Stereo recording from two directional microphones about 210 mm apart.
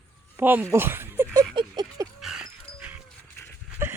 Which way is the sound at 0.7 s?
10° right (ahead or behind).